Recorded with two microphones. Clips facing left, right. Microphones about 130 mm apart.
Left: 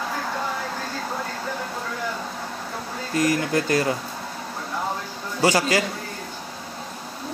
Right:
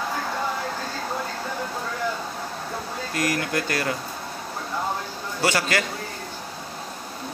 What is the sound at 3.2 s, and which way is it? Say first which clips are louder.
Speech: left 4 dB; 25° left (ahead or behind).